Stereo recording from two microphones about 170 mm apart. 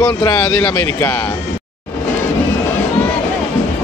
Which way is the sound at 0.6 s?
5° left (ahead or behind).